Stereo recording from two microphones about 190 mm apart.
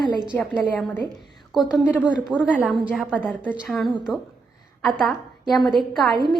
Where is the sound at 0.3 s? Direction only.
5° left (ahead or behind).